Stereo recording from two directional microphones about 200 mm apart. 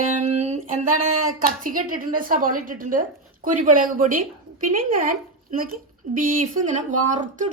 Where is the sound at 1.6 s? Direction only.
45° right (ahead or behind).